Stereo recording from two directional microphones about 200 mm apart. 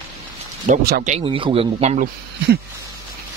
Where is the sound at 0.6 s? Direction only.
45° right (ahead or behind).